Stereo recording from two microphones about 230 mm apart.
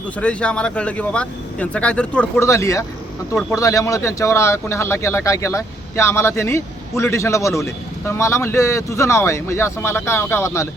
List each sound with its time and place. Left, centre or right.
0.2 s speech: centre